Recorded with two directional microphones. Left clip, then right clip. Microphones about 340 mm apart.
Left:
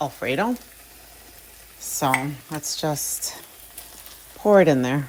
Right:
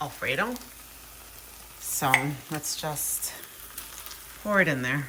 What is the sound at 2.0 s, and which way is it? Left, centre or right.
Speech, centre.